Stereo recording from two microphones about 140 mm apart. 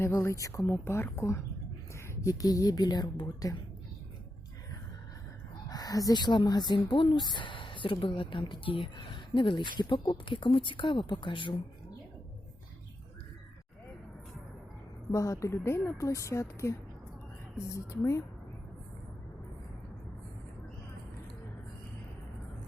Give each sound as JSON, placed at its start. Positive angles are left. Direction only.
{"t": 0.0, "sound": "speech", "side_deg": 20}
{"t": 5.6, "sound": "speech", "side_deg": 25}
{"t": 15.1, "sound": "speech", "side_deg": 20}
{"t": 17.7, "sound": "speech", "side_deg": 20}